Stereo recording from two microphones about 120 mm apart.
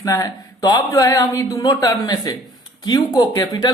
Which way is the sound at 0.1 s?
30° left (ahead or behind).